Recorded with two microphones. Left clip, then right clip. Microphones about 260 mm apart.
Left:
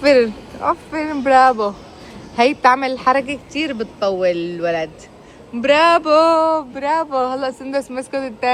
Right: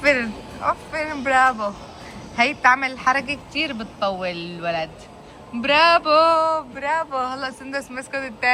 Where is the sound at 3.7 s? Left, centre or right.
Right.